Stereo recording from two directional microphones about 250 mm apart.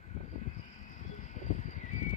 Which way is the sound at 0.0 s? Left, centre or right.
Left.